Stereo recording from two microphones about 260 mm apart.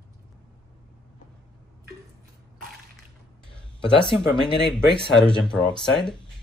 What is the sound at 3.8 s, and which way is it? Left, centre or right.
Speech, centre.